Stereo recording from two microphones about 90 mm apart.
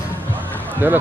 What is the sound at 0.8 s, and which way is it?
Speech, 20° right (ahead or behind).